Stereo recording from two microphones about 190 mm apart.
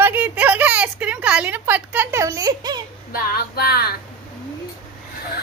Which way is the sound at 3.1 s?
55° left (ahead or behind).